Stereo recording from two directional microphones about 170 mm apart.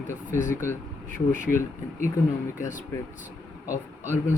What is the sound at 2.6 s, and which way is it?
Speech, 50° left (ahead or behind).